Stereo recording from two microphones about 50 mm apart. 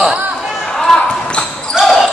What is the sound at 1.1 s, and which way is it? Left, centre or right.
Basketball bounce, left.